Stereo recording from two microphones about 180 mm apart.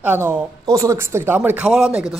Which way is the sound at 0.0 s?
10° right (ahead or behind).